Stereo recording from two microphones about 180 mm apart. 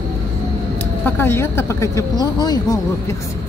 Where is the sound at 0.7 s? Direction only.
10° left (ahead or behind).